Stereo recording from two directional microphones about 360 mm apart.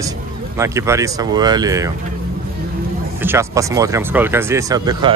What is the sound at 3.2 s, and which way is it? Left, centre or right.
Speech, centre.